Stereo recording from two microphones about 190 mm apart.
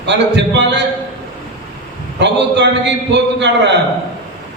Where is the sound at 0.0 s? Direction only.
65° right (ahead or behind).